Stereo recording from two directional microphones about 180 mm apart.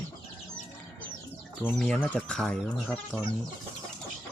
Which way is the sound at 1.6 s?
5° left (ahead or behind).